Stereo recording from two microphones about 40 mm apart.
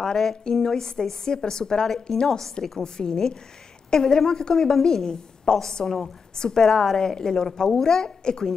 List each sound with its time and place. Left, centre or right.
0.0 s a woman's voice: centre